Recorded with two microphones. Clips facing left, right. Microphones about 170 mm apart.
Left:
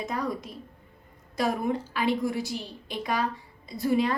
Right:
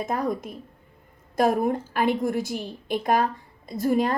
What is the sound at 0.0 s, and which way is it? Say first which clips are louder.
A woman's voice: right 4 dB; 50° right (ahead or behind).